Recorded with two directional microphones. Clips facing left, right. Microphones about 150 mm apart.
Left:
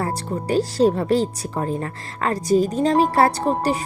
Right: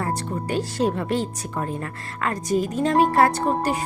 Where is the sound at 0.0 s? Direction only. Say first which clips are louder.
Left 2 dB; 35° left (ahead or behind).